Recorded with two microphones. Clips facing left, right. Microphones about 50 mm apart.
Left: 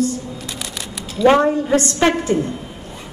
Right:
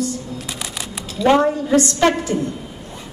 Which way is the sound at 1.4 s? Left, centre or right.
Left.